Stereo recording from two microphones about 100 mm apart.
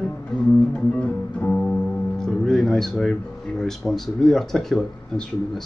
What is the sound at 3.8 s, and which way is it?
Speech, centre (ahead or behind).